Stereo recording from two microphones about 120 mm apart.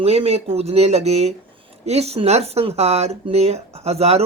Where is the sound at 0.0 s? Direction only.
55° right (ahead or behind).